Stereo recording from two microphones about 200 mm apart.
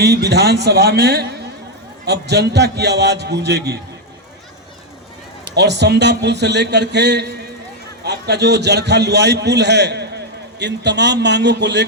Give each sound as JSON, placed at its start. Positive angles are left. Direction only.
{"t": 0.0, "sound": "a man's voice", "side_deg": -55}
{"t": 5.5, "sound": "a man's voice", "side_deg": -60}